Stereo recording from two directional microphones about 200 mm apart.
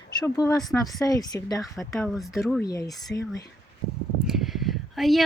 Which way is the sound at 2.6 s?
15° left (ahead or behind).